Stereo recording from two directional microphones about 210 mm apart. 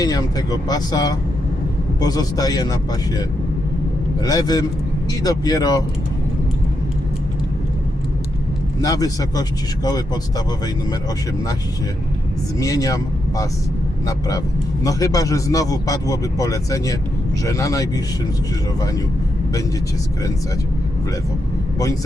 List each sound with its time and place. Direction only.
0.0 s a man's voice: 15° left (ahead or behind)
4.2 s a man's voice: 20° left (ahead or behind)
8.8 s a man's voice: 15° left (ahead or behind)
12.5 s a man's voice: 15° left (ahead or behind)